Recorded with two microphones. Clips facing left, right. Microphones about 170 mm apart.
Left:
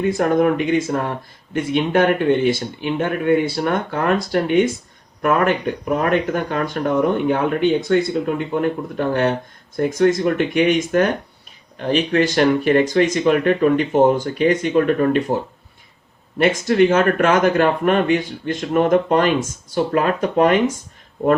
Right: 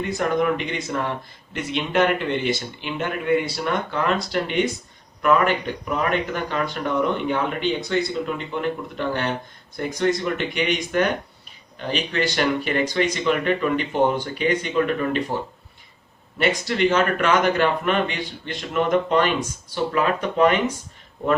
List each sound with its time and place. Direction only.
0.1 s speech: 45° left (ahead or behind)
9.0 s speech: 40° left (ahead or behind)
16.4 s speech: 45° left (ahead or behind)